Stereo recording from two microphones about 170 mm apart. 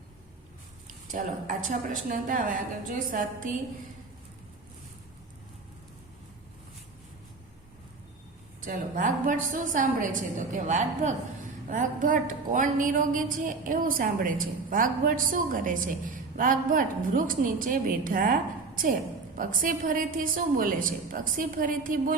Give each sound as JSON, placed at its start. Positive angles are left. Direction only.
{"t": 1.1, "sound": "speech", "side_deg": -50}
{"t": 8.6, "sound": "speech", "side_deg": -50}
{"t": 19.4, "sound": "speech", "side_deg": -55}